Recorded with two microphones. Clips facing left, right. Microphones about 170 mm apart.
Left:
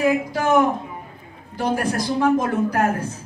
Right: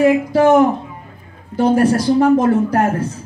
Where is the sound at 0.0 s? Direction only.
30° right (ahead or behind).